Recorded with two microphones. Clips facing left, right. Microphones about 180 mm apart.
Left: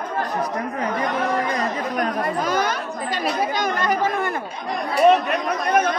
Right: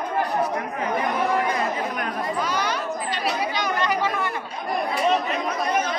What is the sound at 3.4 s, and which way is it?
Chatter, 45° left (ahead or behind).